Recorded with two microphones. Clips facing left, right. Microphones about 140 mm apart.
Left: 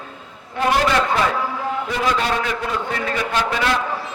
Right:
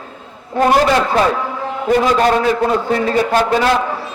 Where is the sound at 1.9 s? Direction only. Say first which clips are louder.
Right 10 dB; 45° right (ahead or behind).